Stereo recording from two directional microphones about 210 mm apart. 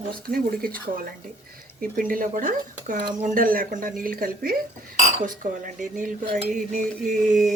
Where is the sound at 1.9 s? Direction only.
40° right (ahead or behind).